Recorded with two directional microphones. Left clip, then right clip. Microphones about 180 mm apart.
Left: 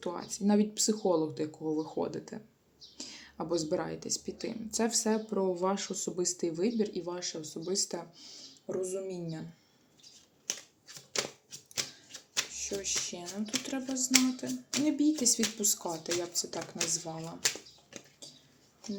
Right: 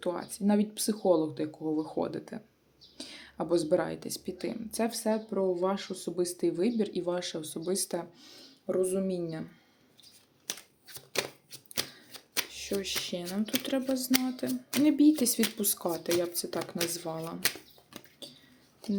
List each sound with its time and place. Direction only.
0.0 s speech: 15° right (ahead or behind)
3.0 s whispering: 15° right (ahead or behind)
3.7 s speech: 15° right (ahead or behind)
4.7 s speech: 5° right (ahead or behind); by 8.7 s 25° right (ahead or behind)
8.7 s speech: 45° right (ahead or behind)
12.3 s speech: 40° right (ahead or behind)
18.2 s a sound: 45° right (ahead or behind)